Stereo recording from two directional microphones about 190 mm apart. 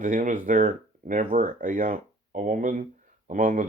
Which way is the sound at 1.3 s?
45° right (ahead or behind).